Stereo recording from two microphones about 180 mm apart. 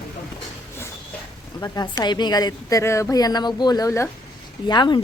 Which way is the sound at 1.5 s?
20° left (ahead or behind).